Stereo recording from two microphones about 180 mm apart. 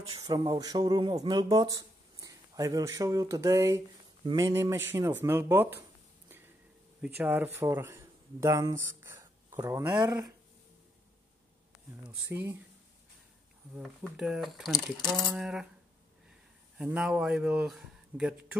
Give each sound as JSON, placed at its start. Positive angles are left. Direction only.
{"t": 0.2, "sound": "speech", "side_deg": -20}
{"t": 6.2, "sound": "a sound", "side_deg": -10}
{"t": 7.0, "sound": "speech", "side_deg": -10}
{"t": 12.3, "sound": "speech", "side_deg": -10}
{"t": 13.7, "sound": "speech", "side_deg": 0}
{"t": 16.7, "sound": "speech", "side_deg": -5}